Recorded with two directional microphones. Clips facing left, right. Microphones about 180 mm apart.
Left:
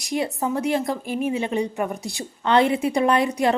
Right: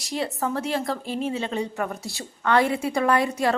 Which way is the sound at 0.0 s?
15° left (ahead or behind).